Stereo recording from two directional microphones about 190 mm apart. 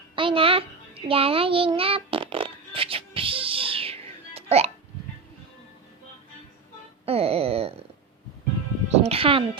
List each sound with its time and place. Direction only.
0.2 s child singing: 25° right (ahead or behind)
7.0 s wail: 30° right (ahead or behind)
8.9 s music: 30° right (ahead or behind)